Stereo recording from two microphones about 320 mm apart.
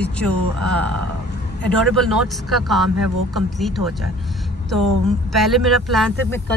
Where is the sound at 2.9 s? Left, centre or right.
Right.